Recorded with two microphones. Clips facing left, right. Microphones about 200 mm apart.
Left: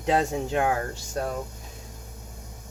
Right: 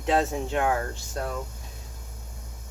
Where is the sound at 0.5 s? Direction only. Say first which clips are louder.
Even; 30° left (ahead or behind).